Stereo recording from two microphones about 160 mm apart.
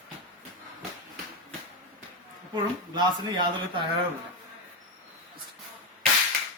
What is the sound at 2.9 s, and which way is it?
Speech, 25° right (ahead or behind).